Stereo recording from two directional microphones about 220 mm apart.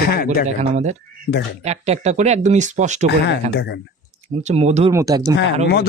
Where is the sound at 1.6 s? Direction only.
30° right (ahead or behind).